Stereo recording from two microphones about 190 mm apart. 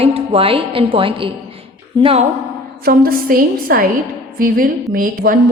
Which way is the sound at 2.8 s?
50° right (ahead or behind).